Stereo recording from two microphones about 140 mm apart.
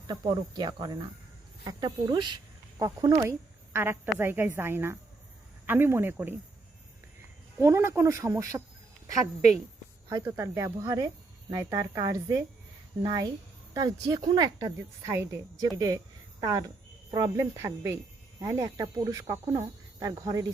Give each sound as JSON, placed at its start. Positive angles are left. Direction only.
{"t": 0.1, "sound": "speech", "side_deg": -30}
{"t": 7.6, "sound": "speech", "side_deg": -20}
{"t": 10.1, "sound": "speech", "side_deg": -20}
{"t": 17.6, "sound": "speech", "side_deg": -20}